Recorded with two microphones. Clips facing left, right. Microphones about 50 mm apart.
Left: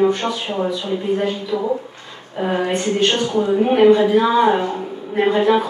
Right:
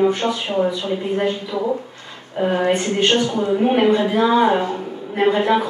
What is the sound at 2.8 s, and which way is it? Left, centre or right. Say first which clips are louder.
Speech: left 1 dB; centre.